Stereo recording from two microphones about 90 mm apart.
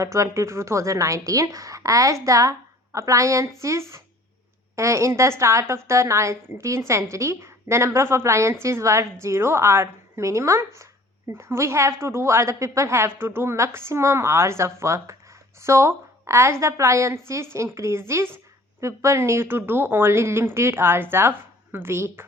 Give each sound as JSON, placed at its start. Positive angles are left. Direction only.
{"t": 0.0, "sound": "a woman's voice", "side_deg": -35}